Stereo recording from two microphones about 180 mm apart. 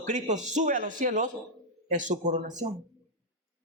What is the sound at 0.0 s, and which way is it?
Speech, 40° right (ahead or behind).